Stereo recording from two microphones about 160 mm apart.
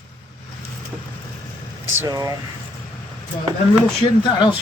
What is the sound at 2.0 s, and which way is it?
Speech, 25° right (ahead or behind).